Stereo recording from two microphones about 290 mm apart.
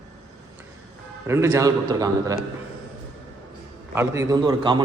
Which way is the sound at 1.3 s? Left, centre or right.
Centre.